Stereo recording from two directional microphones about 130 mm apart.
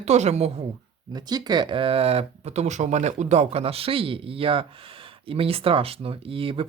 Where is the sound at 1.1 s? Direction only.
30° right (ahead or behind).